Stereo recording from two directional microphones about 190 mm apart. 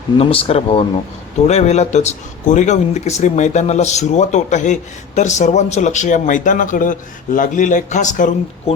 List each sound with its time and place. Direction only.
0.2 s speech: 30° left (ahead or behind)